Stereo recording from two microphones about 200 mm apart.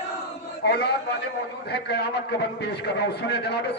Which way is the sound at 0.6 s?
55° left (ahead or behind).